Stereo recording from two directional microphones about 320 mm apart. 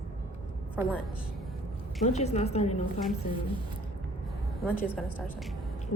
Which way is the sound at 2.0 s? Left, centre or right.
Left.